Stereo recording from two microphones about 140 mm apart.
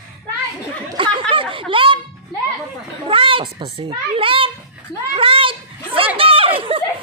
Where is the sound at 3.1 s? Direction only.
40° right (ahead or behind).